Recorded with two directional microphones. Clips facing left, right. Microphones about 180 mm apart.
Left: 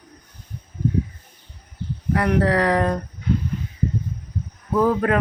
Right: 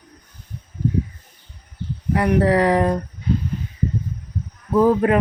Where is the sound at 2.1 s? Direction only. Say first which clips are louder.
Right 2 dB; 20° right (ahead or behind).